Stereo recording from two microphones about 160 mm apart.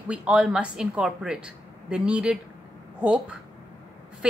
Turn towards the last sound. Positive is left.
turn(degrees=-5)  # may be behind; listen again after turning